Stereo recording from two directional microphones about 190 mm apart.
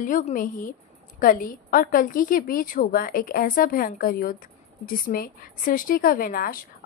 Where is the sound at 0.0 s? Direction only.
45° left (ahead or behind).